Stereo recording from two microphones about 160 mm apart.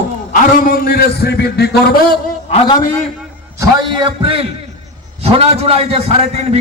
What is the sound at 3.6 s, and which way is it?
A man's voice, 30° right (ahead or behind).